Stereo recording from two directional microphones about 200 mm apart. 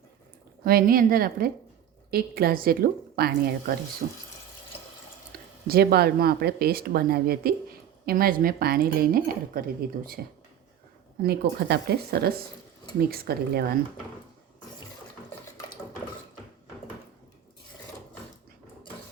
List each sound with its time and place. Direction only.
0.6 s speech: 50° right (ahead or behind)
4.0 s speech: 40° right (ahead or behind)
5.6 s speech: 50° right (ahead or behind)
11.2 s speech: 55° right (ahead or behind)